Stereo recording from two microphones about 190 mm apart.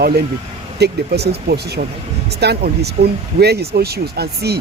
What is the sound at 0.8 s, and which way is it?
Speech, 60° right (ahead or behind).